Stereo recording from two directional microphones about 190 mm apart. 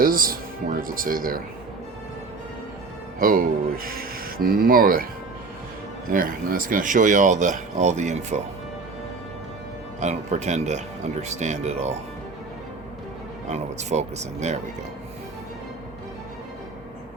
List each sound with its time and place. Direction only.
0.0 s speech: 50° right (ahead or behind)
3.2 s speech: 50° right (ahead or behind)
6.1 s speech: 45° right (ahead or behind)
10.0 s speech: 35° right (ahead or behind)
13.5 s speech: 35° right (ahead or behind)